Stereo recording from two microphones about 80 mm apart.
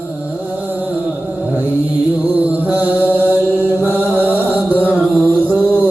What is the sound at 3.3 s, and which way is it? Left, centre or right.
Chant, right.